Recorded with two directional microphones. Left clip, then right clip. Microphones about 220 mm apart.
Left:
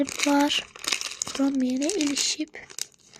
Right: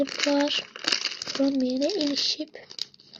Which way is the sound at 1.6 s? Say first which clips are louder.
Right 1 dB; 45° left (ahead or behind).